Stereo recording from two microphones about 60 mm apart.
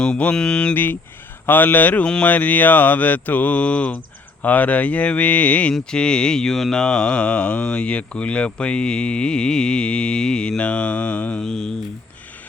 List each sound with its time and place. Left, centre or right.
0.0 s speech: centre
0.7 s speech: left
2.2 s mantra: left
5.9 s speech: centre
11.4 s speech: centre